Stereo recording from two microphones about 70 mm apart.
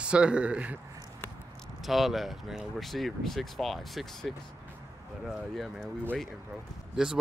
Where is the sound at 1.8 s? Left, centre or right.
Centre.